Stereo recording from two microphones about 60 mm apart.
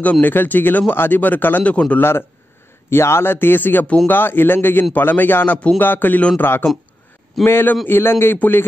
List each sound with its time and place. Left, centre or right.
0.0 s speech: left
2.0 s a man's voice: left